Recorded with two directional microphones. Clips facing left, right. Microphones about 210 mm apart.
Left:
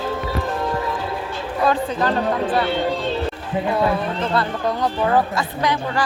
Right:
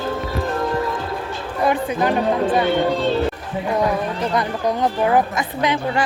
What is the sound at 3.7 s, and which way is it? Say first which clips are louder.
Speech: right 2 dB; 15° right (ahead or behind).